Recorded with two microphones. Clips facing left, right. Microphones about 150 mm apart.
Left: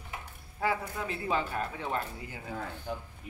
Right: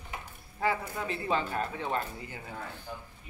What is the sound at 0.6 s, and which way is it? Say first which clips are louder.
Speech: right 1 dB; centre (ahead or behind).